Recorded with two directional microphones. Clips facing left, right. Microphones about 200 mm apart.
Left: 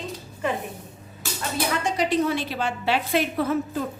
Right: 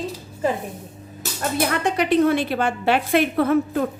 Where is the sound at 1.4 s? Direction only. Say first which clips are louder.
Right 5 dB; 55° right (ahead or behind).